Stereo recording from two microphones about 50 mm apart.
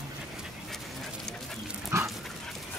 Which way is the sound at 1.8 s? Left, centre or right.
Right.